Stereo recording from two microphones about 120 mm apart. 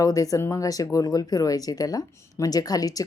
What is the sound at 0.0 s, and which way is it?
Speech, 30° left (ahead or behind).